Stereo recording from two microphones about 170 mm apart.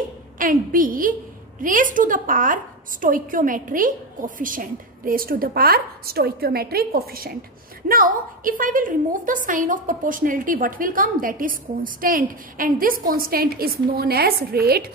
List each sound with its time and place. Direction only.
0.4 s a woman's voice: 55° right (ahead or behind)